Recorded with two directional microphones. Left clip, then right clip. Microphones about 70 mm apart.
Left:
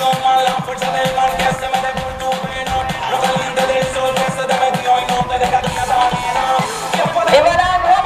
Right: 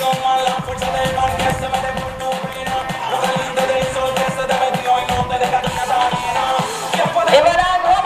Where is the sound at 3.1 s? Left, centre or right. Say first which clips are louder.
Left 2 dB; centre.